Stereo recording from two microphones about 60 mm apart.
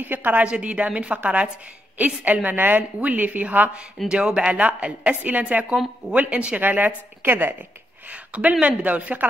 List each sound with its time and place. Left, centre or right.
0.0 s a woman's voice: right
8.1 s a woman's voice: right